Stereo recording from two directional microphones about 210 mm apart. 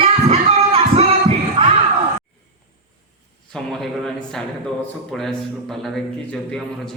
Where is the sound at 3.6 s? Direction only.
5° left (ahead or behind).